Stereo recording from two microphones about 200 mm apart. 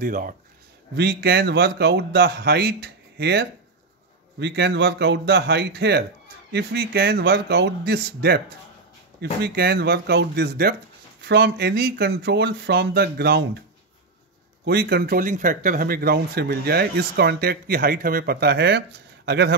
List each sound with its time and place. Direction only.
0.0 s speech: 45° right (ahead or behind)
0.9 s speech: 55° right (ahead or behind)
14.6 s speech: 55° right (ahead or behind)